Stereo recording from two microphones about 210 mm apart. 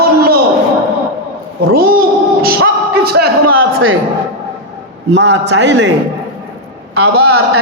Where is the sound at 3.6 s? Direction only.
80° right.